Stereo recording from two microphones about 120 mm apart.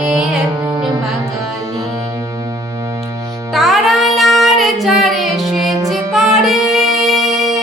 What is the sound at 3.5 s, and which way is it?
Child singing, centre (ahead or behind).